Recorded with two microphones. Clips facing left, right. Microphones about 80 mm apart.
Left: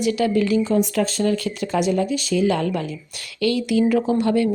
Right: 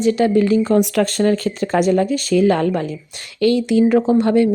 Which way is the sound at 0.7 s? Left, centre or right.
Right.